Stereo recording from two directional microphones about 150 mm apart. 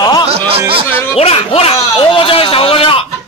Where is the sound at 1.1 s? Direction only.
40° left (ahead or behind).